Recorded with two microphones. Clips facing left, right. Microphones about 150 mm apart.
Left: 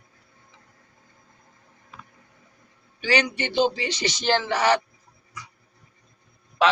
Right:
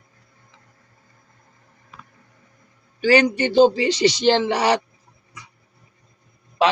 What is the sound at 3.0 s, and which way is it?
Speech, 45° right (ahead or behind).